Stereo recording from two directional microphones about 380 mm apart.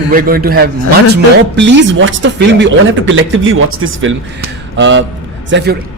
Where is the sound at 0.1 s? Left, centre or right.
Right.